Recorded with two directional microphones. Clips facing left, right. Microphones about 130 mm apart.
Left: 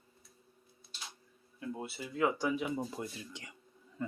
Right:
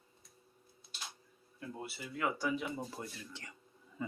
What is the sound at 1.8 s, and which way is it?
Speech, 25° left (ahead or behind).